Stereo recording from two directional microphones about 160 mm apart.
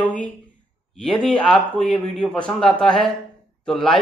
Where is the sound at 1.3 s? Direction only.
5° left (ahead or behind).